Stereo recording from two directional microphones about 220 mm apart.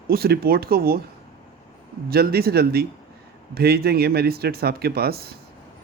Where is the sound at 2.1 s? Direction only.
45° right (ahead or behind).